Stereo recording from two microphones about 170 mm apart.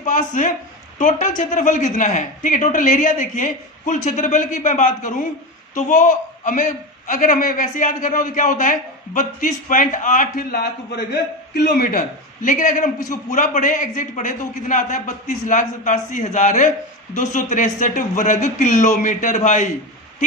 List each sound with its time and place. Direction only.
0.0 s a man's voice: 50° left (ahead or behind)